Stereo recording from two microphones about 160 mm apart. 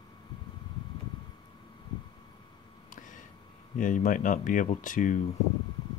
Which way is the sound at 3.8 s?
55° left (ahead or behind).